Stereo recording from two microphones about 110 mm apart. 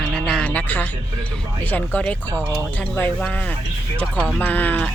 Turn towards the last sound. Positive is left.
turn(degrees=15)  # may be behind; listen again after turning